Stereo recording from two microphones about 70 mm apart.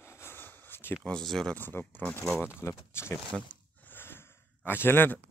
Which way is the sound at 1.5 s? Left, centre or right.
Left.